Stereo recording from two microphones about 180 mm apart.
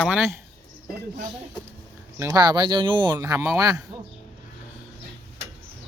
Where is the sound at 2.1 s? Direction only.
20° right (ahead or behind).